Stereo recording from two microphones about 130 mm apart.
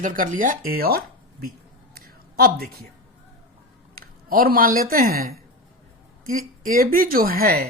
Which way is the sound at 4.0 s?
90° right.